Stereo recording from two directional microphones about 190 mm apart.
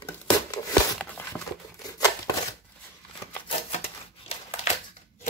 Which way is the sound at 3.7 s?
35° left (ahead or behind).